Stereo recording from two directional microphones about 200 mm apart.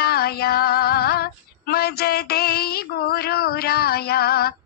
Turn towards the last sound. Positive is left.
turn(degrees=50)  # may be behind; listen again after turning